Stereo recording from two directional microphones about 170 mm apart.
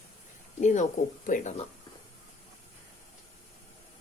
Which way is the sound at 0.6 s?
45° left (ahead or behind).